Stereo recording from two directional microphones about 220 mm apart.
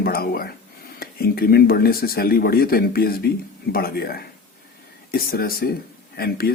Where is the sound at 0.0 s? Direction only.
45° left (ahead or behind).